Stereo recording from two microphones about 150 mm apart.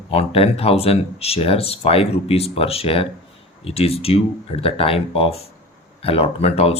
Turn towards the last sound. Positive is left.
turn(degrees=45)  # may be behind; listen again after turning